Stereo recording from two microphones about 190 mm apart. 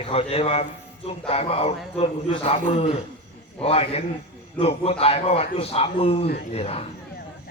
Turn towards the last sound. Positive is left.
turn(degrees=30)  # may be behind; listen again after turning